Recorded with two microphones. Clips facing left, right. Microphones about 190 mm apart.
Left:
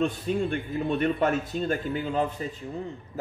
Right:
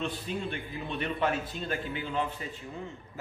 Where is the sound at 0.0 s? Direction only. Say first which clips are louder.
Left 8 dB; 45° left (ahead or behind).